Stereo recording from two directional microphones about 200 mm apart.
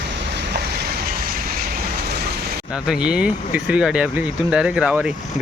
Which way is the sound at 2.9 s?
5° right (ahead or behind).